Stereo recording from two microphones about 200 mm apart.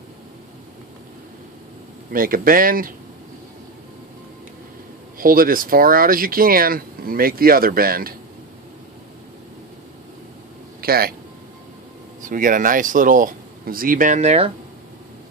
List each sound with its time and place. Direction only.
2.1 s speech: 45° right (ahead or behind)
5.2 s speech: 45° right (ahead or behind)
10.8 s speech: 50° right (ahead or behind)
12.2 s speech: 40° right (ahead or behind)